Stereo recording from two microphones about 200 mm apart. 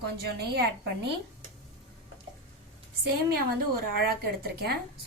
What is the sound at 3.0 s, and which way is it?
A woman's voice, 50° right (ahead or behind).